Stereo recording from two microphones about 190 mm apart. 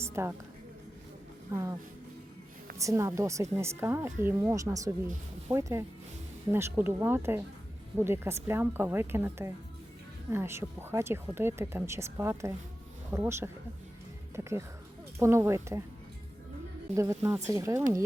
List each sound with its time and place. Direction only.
0.0 s a sound: 15° right (ahead or behind)
1.5 s speech: 15° right (ahead or behind)
2.7 s speech: 15° right (ahead or behind)
15.2 s speech: 15° right (ahead or behind)
16.9 s speech: 15° right (ahead or behind)